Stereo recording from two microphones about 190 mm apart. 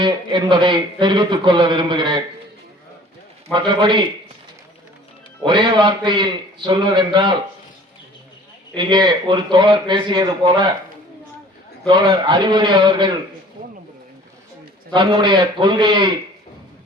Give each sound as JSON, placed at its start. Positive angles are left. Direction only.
{"t": 0.0, "sound": "a man's voice", "side_deg": -25}
{"t": 3.5, "sound": "a man's voice", "side_deg": -25}
{"t": 5.5, "sound": "a man's voice", "side_deg": -25}
{"t": 8.7, "sound": "a man's voice", "side_deg": -25}
{"t": 11.9, "sound": "a man's voice", "side_deg": -25}
{"t": 14.9, "sound": "a man's voice", "side_deg": -25}